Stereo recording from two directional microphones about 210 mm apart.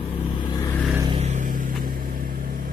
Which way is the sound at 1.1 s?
30° right (ahead or behind).